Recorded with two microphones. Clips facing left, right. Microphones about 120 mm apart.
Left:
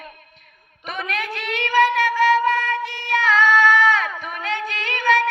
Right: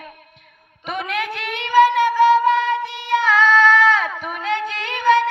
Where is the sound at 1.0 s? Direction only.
15° right (ahead or behind).